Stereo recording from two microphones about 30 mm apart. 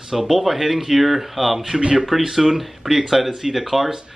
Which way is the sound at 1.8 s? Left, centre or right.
Right.